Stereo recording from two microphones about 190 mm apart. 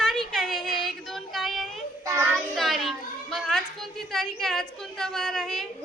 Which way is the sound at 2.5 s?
Centre (ahead or behind).